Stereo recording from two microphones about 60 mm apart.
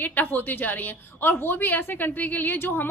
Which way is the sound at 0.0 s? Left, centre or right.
Left.